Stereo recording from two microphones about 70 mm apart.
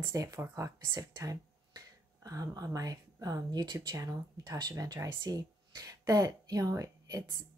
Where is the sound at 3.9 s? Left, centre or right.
Right.